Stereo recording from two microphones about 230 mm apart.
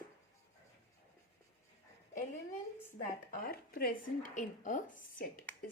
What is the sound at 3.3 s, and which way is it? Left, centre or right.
Speech, left.